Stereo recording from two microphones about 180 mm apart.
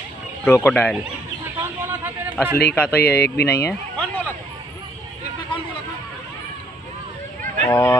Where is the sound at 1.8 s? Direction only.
10° right (ahead or behind).